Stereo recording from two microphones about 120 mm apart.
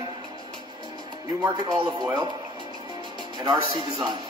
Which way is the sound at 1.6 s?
35° right (ahead or behind).